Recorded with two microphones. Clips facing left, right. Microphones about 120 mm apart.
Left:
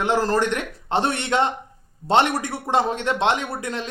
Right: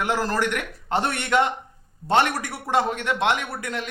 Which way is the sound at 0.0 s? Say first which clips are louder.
Left 3 dB; 25° left (ahead or behind).